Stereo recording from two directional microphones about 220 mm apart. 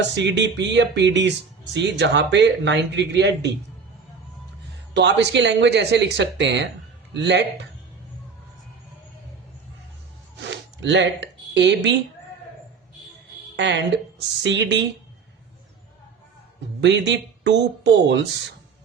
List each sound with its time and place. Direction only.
0.0 s a man's voice: 55° right (ahead or behind)
4.9 s a man's voice: 50° right (ahead or behind)
10.5 s speech: 55° right (ahead or behind)
13.6 s a man's voice: 55° right (ahead or behind)
16.8 s a man's voice: 55° right (ahead or behind)